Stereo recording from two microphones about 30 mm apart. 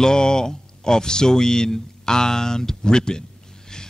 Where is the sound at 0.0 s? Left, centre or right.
Left.